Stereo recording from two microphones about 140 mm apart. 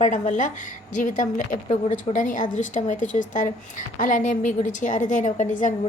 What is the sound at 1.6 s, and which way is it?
A woman's voice, 50° left (ahead or behind).